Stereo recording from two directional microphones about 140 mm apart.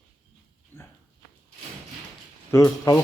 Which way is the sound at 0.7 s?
15° left (ahead or behind).